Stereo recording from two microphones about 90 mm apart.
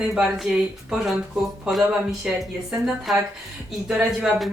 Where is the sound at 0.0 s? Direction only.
5° right (ahead or behind).